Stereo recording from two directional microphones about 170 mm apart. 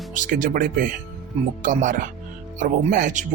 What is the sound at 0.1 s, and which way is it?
Speech, 50° right (ahead or behind).